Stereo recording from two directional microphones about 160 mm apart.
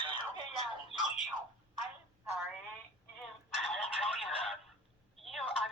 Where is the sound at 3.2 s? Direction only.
Centre (ahead or behind).